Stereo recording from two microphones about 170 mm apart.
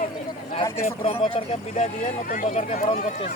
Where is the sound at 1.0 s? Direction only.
35° left (ahead or behind).